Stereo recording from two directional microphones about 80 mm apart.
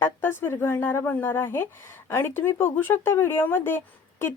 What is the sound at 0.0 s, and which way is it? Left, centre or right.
Speech, left.